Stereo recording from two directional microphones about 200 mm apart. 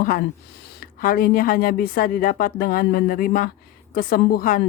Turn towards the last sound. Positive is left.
turn(degrees=45)  # may be behind; listen again after turning